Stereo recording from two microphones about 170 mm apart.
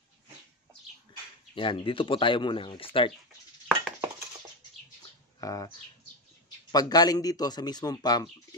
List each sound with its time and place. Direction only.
1.5 s speech: 30° left (ahead or behind)
3.6 s a sound: centre (ahead or behind)
5.0 s bird: 20° left (ahead or behind)
6.7 s speech: 25° left (ahead or behind)